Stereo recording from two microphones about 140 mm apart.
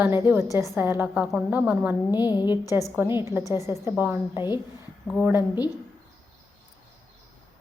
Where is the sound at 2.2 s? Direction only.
30° left (ahead or behind).